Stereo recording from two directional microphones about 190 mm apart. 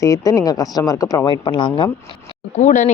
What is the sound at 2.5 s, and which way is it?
Speech, 40° left (ahead or behind).